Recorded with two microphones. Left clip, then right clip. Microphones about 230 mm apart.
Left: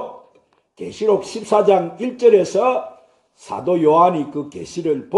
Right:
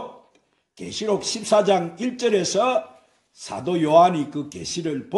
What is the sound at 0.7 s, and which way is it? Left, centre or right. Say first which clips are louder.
A man's voice: left 7 dB; right.